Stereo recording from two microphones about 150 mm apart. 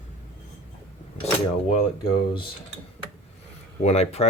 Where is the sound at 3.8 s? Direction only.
45° left (ahead or behind).